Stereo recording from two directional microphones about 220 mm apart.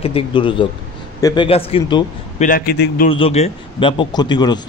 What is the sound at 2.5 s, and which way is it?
Speech, 40° left (ahead or behind).